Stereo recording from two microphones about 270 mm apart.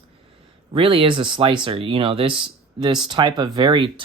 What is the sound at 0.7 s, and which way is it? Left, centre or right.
Speech, centre.